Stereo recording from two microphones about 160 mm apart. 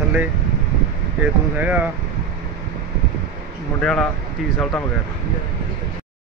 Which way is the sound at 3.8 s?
5° left (ahead or behind).